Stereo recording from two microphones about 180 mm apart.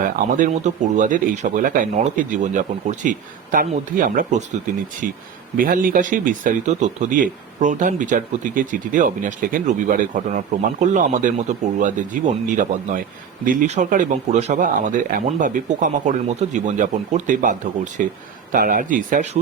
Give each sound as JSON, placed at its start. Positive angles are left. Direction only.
{"t": 0.0, "sound": "speech", "side_deg": -50}